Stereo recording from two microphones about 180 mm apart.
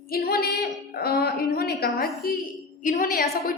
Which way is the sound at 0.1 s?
60° left (ahead or behind).